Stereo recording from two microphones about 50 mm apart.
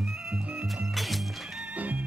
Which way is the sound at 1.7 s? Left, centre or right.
Right.